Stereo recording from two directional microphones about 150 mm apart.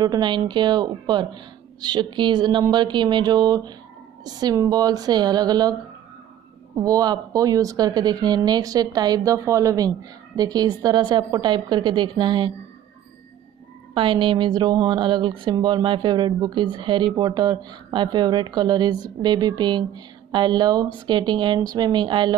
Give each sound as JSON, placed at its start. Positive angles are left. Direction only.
{"t": 0.0, "sound": "speech", "side_deg": -30}
{"t": 6.8, "sound": "speech", "side_deg": -25}
{"t": 13.9, "sound": "speech", "side_deg": -35}